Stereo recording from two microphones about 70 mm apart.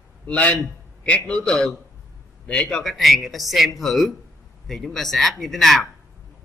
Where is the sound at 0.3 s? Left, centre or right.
Centre.